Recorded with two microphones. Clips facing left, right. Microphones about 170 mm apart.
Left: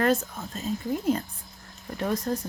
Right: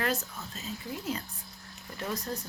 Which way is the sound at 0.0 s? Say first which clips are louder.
Left 8 dB; 50° left (ahead or behind).